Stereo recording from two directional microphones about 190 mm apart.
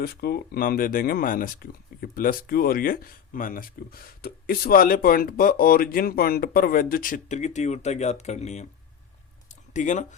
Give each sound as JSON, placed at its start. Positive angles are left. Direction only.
{"t": 0.0, "sound": "speech", "side_deg": 55}
{"t": 9.7, "sound": "speech", "side_deg": 40}